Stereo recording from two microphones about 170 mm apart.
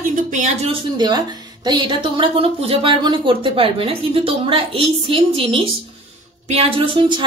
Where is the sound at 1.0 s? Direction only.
25° right (ahead or behind).